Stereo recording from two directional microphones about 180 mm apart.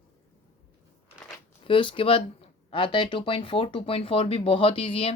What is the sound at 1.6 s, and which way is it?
Speech, 30° left (ahead or behind).